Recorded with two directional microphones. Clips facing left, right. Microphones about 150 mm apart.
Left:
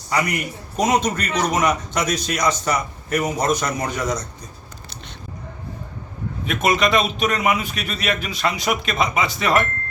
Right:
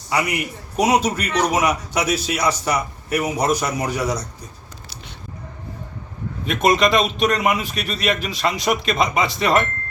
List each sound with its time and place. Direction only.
0.1 s a man's voice: 10° right (ahead or behind)
6.4 s a man's voice: centre (ahead or behind)